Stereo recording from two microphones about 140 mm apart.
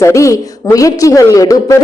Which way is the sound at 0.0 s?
20° left (ahead or behind).